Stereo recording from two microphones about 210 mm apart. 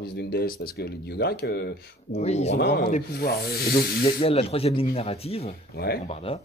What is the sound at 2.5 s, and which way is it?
Speech, 50° left (ahead or behind).